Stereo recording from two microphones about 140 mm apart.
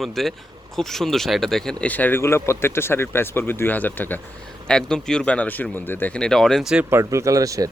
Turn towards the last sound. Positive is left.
turn(degrees=-25)  # may be behind; listen again after turning